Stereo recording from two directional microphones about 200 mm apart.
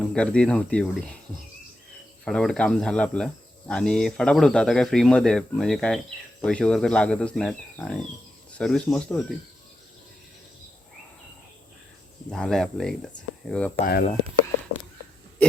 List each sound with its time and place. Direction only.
0.0 s speech: 5° left (ahead or behind)
2.2 s speech: 5° left (ahead or behind)
12.3 s speech: 5° left (ahead or behind)
13.8 s speech: 45° left (ahead or behind)